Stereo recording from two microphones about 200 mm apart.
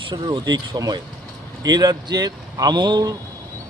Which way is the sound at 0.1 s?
20° right (ahead or behind).